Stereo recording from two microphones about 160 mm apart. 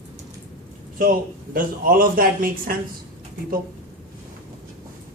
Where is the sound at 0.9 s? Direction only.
60° right (ahead or behind).